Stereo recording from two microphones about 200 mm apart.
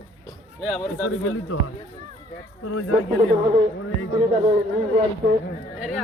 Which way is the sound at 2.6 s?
90° left.